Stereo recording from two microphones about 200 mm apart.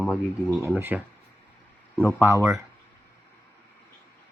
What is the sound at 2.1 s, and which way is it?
Speech, 15° right (ahead or behind).